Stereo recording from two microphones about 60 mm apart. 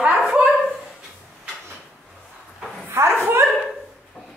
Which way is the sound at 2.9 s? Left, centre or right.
Right.